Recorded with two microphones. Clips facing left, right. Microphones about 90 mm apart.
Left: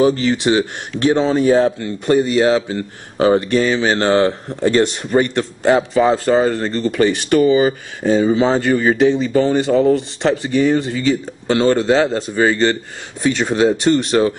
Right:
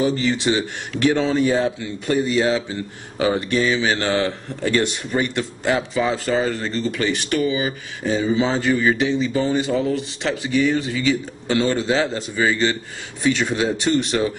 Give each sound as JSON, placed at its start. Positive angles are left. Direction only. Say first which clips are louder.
{"t": 0.3, "sound": "speech", "louder": "left 5 dB", "side_deg": 40}
{"t": 1.5, "sound": "speech", "louder": "left 6 dB", "side_deg": 45}
{"t": 10.2, "sound": "speech", "louder": "left 4 dB", "side_deg": 40}
{"t": 13.2, "sound": "speech", "louder": "left 5 dB", "side_deg": 35}
{"t": 13.9, "sound": "speech", "louder": "left 5 dB", "side_deg": 45}